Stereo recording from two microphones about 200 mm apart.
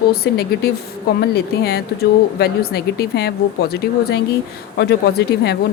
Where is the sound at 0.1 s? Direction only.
50° left (ahead or behind).